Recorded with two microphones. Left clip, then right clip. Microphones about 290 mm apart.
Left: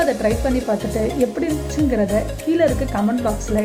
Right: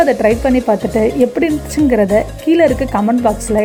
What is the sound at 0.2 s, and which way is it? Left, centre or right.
A woman's voice, right.